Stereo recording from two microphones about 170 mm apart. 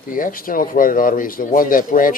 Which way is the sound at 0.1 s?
55° left (ahead or behind).